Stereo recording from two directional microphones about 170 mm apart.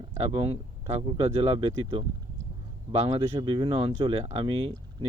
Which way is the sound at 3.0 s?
30° right (ahead or behind).